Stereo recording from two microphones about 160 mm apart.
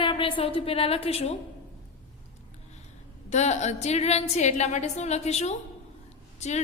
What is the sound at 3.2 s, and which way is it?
A woman's voice, 45° left (ahead or behind).